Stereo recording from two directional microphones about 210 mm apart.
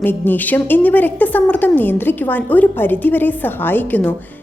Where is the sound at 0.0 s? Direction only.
10° left (ahead or behind).